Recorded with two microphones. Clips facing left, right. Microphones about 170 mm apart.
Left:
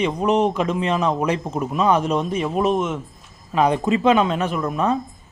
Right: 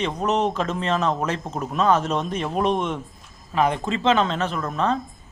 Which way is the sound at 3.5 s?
15° left (ahead or behind).